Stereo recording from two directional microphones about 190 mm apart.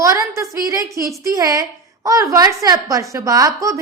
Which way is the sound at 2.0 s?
15° right (ahead or behind).